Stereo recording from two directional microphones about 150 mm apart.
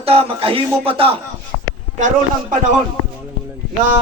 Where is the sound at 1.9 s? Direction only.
55° right (ahead or behind).